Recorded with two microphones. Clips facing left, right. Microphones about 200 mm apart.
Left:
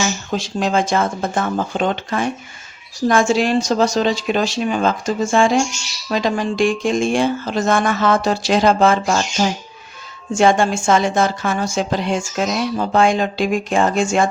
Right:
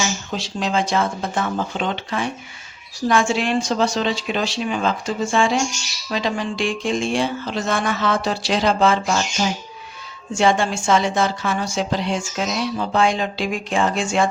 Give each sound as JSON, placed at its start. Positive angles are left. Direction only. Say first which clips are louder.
{"t": 0.3, "sound": "a woman's voice", "louder": "left 4 dB", "side_deg": 50}